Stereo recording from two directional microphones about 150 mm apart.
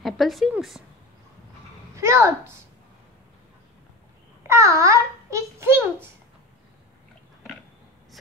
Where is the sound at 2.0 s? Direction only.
20° right (ahead or behind).